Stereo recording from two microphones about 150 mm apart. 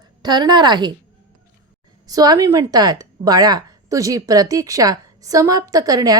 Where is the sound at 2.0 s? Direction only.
25° right (ahead or behind).